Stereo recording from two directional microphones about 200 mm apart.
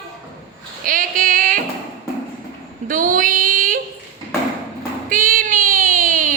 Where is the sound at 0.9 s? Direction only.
45° right (ahead or behind).